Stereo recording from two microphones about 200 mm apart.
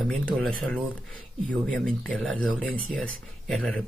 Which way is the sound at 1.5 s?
5° left (ahead or behind).